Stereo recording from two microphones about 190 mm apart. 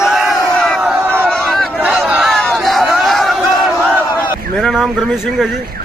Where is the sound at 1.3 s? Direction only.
5° left (ahead or behind).